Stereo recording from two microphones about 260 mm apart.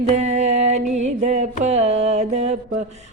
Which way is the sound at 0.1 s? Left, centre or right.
Right.